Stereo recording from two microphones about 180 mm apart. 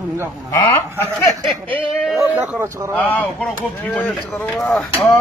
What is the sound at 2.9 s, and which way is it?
Speech, 10° left (ahead or behind).